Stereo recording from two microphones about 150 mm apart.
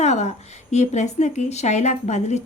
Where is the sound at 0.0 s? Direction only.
50° left (ahead or behind).